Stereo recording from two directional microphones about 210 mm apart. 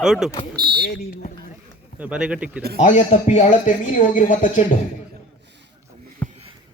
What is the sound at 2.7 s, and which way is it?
Speech, 30° left (ahead or behind).